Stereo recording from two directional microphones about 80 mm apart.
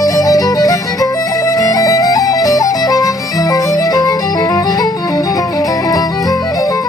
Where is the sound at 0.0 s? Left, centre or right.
Left.